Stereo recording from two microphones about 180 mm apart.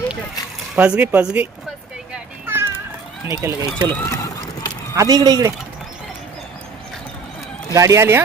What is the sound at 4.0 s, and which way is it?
Run, 15° left (ahead or behind).